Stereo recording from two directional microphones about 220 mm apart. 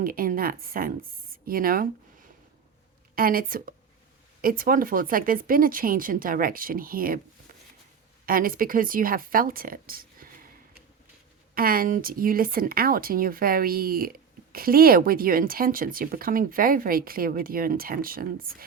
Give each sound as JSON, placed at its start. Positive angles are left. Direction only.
{"t": 0.0, "sound": "a woman's voice", "side_deg": -40}
{"t": 3.2, "sound": "a woman's voice", "side_deg": -40}
{"t": 8.3, "sound": "a woman's voice", "side_deg": -40}
{"t": 11.5, "sound": "a woman's voice", "side_deg": -40}